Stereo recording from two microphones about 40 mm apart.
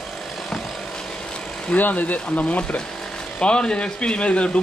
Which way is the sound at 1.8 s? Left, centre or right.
Left.